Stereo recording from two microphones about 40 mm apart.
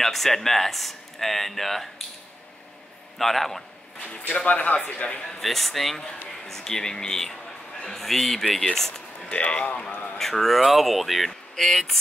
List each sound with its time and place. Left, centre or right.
0.0 s speech: centre
3.2 s a man's voice: centre
4.3 s speech: left
5.2 s speech: centre
9.3 s speech: left
9.8 s speech: left
10.1 s speech: centre